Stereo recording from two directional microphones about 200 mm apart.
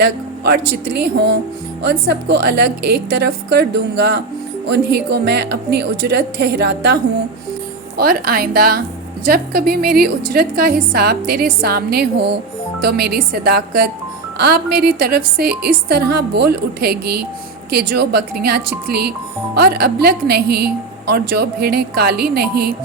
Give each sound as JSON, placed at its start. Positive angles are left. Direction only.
{"t": 0.0, "sound": "a woman's voice", "side_deg": -55}